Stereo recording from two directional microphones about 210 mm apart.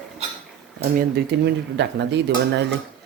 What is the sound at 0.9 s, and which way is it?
Speech, 55° right (ahead or behind).